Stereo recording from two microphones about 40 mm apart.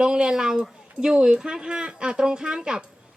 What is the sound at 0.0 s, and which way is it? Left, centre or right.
Speech, centre.